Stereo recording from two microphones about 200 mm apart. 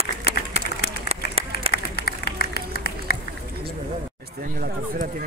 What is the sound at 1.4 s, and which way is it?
Applause, 30° right (ahead or behind).